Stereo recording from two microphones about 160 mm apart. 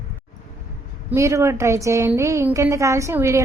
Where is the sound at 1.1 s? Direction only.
20° right (ahead or behind).